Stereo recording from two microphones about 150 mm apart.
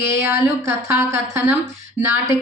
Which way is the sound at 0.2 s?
15° right (ahead or behind).